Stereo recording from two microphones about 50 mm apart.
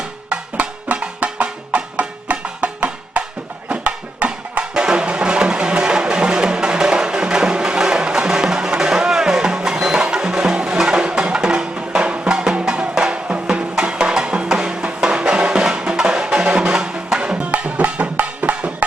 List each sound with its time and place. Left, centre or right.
0.3 s music: right